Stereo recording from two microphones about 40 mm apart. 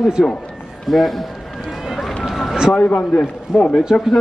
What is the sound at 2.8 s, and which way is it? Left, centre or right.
A man's voice, left.